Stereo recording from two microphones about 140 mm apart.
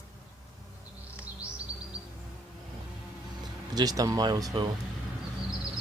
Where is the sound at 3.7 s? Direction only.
25° right (ahead or behind).